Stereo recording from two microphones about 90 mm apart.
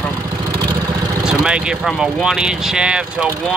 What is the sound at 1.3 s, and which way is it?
Speech, 10° right (ahead or behind).